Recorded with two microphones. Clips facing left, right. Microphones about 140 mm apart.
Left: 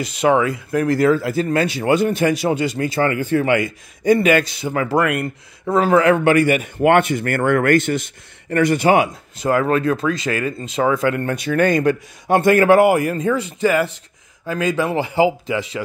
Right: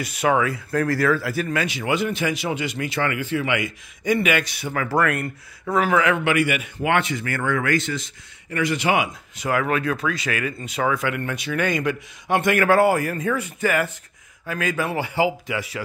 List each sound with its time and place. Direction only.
0.0 s a man's voice: 25° left (ahead or behind)
5.8 s a man's voice: 35° left (ahead or behind)